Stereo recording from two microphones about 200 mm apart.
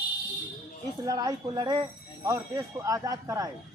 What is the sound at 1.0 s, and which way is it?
Speech, 20° right (ahead or behind).